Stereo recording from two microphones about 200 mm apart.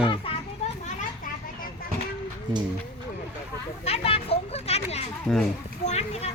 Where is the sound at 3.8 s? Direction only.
30° left (ahead or behind).